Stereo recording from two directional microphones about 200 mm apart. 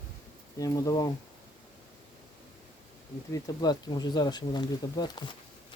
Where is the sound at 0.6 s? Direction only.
15° left (ahead or behind).